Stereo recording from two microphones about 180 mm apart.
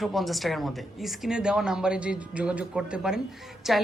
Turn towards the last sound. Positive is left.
turn(degrees=0)  # may be behind; listen again after turning